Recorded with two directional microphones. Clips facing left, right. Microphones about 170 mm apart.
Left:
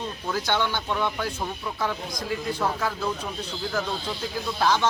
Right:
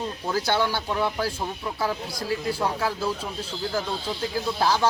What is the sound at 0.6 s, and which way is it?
Speech, 35° right (ahead or behind).